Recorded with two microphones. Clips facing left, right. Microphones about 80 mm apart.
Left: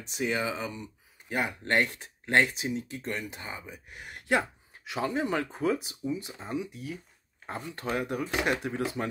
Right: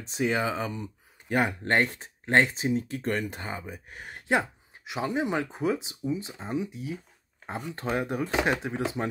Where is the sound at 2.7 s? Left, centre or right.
Right.